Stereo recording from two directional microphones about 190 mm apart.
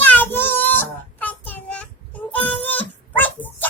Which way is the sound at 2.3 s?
10° left (ahead or behind).